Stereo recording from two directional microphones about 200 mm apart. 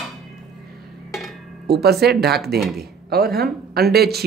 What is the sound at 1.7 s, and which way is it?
Speech, 55° right (ahead or behind).